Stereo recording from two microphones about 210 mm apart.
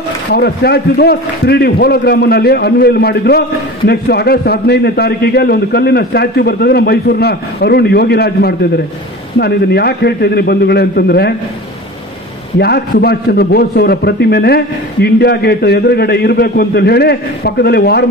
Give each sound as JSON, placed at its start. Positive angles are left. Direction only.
{"t": 0.3, "sound": "a man's voice", "side_deg": 50}
{"t": 12.5, "sound": "a man's voice", "side_deg": 50}